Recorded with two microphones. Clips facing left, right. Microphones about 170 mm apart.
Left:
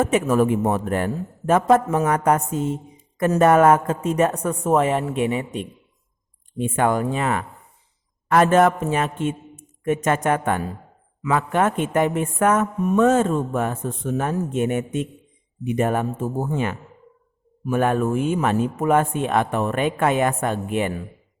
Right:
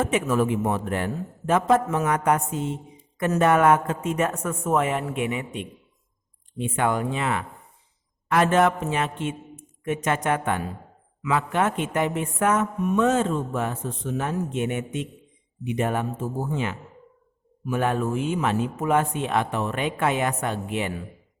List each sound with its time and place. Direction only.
0.0 s a woman's voice: 45° left (ahead or behind)